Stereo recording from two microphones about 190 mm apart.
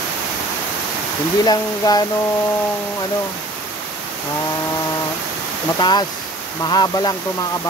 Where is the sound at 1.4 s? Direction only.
20° left (ahead or behind).